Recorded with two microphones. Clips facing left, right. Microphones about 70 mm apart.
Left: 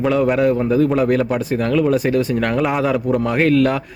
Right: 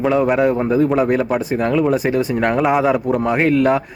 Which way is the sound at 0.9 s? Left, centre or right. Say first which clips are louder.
Even; centre.